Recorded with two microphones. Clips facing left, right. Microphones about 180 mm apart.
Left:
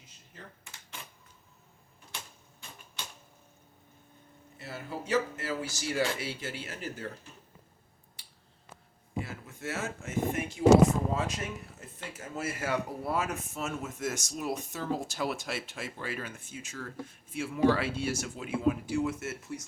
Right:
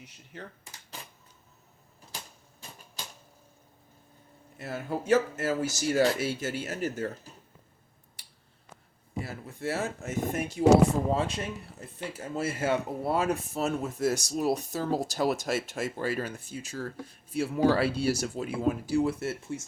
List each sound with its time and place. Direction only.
2.1 s typewriter: 35° right (ahead or behind)
4.5 s speech: 50° right (ahead or behind)
9.2 s speech: 35° right (ahead or behind)